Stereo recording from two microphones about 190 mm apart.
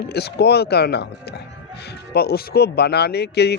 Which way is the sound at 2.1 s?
55° left (ahead or behind).